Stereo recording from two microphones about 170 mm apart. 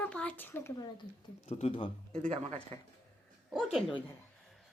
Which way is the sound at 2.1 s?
40° right (ahead or behind).